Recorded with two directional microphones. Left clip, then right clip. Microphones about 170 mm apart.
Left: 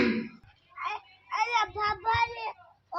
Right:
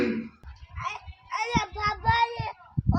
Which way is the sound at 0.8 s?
25° right (ahead or behind).